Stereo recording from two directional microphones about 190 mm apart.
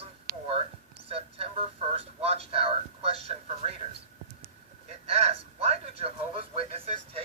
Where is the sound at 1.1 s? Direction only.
30° right (ahead or behind).